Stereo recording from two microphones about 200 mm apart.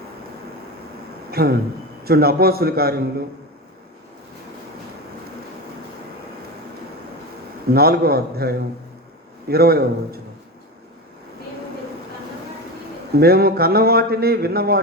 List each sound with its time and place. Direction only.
1.3 s a man's voice: 50° right (ahead or behind)
7.7 s a man's voice: 50° right (ahead or behind)
13.1 s a man's voice: 50° right (ahead or behind)